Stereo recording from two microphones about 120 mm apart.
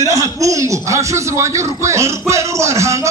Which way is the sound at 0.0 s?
25° right (ahead or behind).